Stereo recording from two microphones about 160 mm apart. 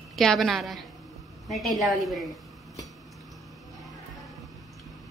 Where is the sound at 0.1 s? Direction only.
Centre (ahead or behind).